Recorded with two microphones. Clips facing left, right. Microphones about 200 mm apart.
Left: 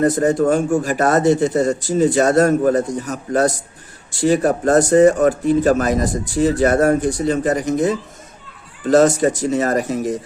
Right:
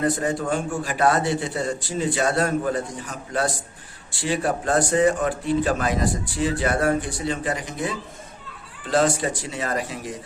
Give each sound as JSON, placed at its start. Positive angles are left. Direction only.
{"t": 0.0, "sound": "speech", "side_deg": 45}